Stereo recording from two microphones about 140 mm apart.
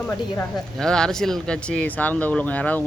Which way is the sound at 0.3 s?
5° left (ahead or behind).